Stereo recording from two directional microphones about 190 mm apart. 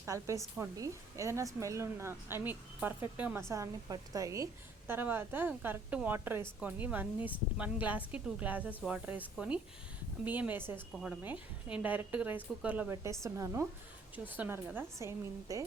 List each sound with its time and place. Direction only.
0.0 s speech: 15° right (ahead or behind)